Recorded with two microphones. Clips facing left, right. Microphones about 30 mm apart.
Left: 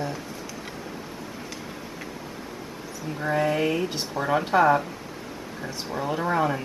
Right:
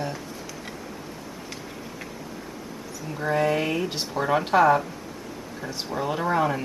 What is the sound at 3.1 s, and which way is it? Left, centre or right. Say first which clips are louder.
Speech: right 1 dB; centre.